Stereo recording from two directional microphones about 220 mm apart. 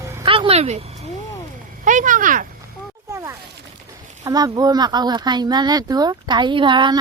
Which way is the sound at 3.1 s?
15° right (ahead or behind).